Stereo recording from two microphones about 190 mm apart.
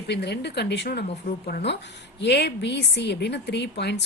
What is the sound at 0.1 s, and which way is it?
A woman's voice, 60° left (ahead or behind).